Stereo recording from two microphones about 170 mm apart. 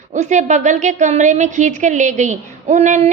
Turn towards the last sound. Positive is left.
turn(degrees=-45)  # may be behind; listen again after turning